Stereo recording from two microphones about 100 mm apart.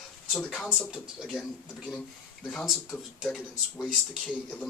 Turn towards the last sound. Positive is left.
turn(degrees=0)  # may be behind; listen again after turning